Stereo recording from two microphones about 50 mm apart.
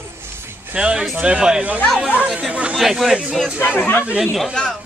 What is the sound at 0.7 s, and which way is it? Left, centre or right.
Speech, right.